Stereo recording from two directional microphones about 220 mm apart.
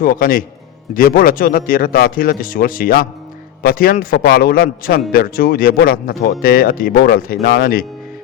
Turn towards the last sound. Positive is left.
turn(degrees=45)  # may be behind; listen again after turning